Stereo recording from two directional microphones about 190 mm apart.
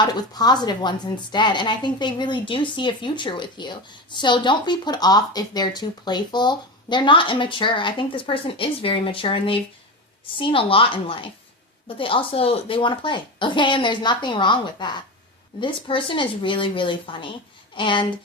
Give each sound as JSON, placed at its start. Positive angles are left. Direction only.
{"t": 0.0, "sound": "a woman's voice", "side_deg": 20}